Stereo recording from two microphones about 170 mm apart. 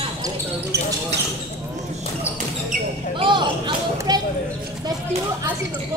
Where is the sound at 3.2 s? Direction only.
25° right (ahead or behind).